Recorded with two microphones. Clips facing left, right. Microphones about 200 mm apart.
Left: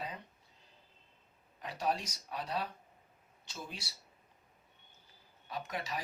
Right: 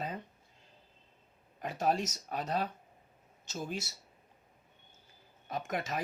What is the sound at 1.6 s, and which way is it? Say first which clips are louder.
Speech: right 4 dB; 45° right (ahead or behind).